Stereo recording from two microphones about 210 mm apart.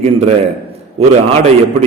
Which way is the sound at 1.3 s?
30° right (ahead or behind).